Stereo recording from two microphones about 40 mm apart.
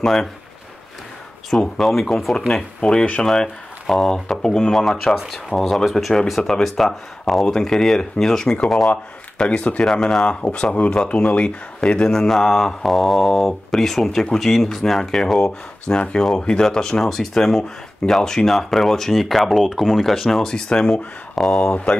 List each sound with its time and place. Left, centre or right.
0.0 s speech: centre
1.5 s speech: centre
2.5 s speech: centre
4.6 s speech: centre
8.9 s speech: left
9.8 s speech: centre
10.5 s speech: left
12.1 s speech: centre
17.0 s speech: centre
19.6 s speech: centre
20.0 s speech: centre
20.5 s speech: centre